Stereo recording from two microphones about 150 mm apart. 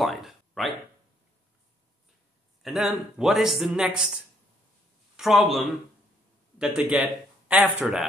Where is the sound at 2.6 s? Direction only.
Centre (ahead or behind).